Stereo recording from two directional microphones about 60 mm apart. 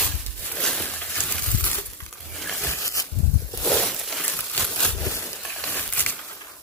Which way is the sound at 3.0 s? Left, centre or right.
Left.